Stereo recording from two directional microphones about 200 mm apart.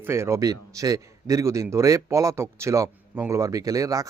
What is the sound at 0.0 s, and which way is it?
A man's voice, 15° right (ahead or behind).